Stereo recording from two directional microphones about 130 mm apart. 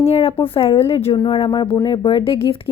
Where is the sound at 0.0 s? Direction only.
55° left (ahead or behind).